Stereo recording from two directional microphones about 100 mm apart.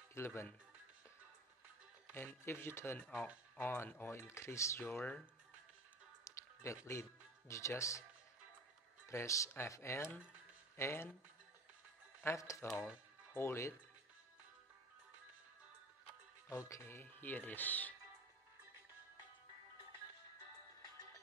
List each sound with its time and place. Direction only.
0.1 s speech: 25° left (ahead or behind)
2.1 s speech: 25° left (ahead or behind)
4.9 s speech: 15° left (ahead or behind)
6.2 s speech: 30° left (ahead or behind)
9.0 s speech: 30° left (ahead or behind)
12.2 s speech: 30° left (ahead or behind)
12.6 s speech: centre (ahead or behind)
13.3 s speech: 25° left (ahead or behind)
16.4 s speech: 30° left (ahead or behind)